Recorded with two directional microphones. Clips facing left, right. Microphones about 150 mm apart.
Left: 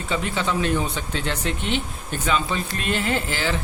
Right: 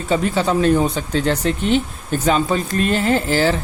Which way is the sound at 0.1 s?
40° right (ahead or behind).